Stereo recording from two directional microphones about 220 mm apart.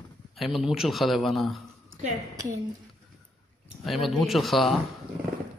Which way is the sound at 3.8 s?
Centre (ahead or behind).